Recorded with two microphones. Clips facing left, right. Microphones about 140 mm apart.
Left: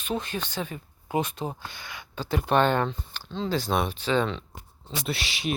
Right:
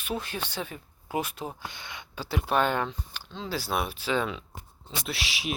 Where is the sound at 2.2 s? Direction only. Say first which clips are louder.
Left 3 dB; 5° right (ahead or behind).